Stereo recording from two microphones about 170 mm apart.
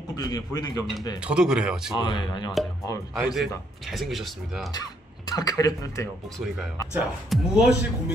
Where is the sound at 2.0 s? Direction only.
25° left (ahead or behind).